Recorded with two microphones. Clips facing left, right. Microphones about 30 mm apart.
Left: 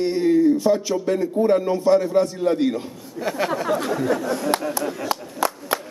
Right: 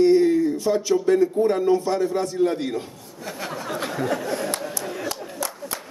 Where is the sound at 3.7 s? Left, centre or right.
Centre.